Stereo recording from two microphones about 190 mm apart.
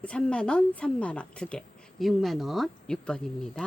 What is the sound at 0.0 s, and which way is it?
A woman's voice, 5° left (ahead or behind).